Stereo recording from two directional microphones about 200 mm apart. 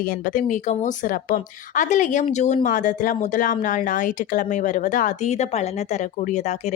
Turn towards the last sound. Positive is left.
turn(degrees=35)  # may be behind; listen again after turning